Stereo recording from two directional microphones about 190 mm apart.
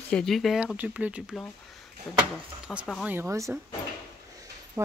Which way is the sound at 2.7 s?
5° right (ahead or behind).